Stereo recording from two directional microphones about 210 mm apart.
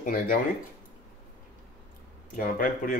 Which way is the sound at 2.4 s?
40° left (ahead or behind).